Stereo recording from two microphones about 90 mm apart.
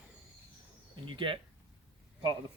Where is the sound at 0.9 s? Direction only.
65° right (ahead or behind).